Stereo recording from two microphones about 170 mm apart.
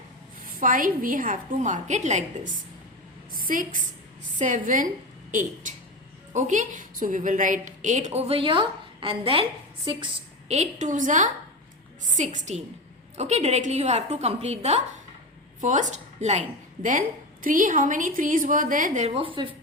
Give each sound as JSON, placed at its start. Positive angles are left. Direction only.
{"t": 0.6, "sound": "a woman's voice", "side_deg": -55}
{"t": 10.5, "sound": "a woman's voice", "side_deg": -45}
{"t": 17.4, "sound": "a woman's voice", "side_deg": -50}
{"t": 19.0, "sound": "a woman's voice", "side_deg": -30}